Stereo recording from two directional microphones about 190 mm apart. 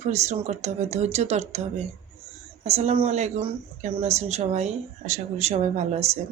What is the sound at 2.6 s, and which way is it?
Speech, 35° right (ahead or behind).